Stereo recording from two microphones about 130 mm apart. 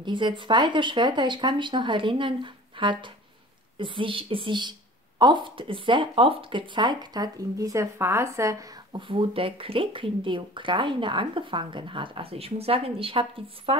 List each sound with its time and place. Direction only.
0.0 s speech: 35° right (ahead or behind)